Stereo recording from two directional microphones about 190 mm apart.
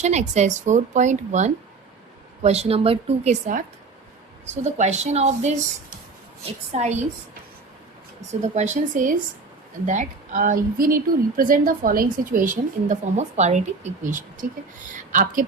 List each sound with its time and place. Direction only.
0.0 s a woman's voice: 35° right (ahead or behind)
4.6 s a woman's voice: 35° right (ahead or behind)
8.3 s a woman's voice: 40° right (ahead or behind)